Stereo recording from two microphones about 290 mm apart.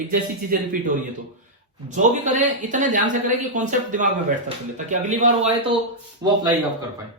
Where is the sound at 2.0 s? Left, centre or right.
Right.